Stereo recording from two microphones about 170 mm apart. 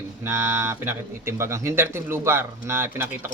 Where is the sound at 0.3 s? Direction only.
15° right (ahead or behind).